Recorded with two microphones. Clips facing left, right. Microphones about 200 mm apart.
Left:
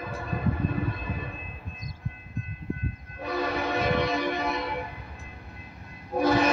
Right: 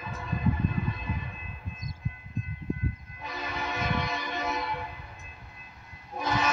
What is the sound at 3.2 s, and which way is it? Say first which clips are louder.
Train: left 8 dB; 60° left (ahead or behind).